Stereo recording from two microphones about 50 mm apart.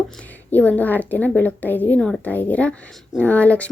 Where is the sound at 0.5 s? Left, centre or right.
Left.